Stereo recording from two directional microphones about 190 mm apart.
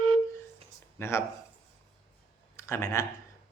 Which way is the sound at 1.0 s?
15° left (ahead or behind).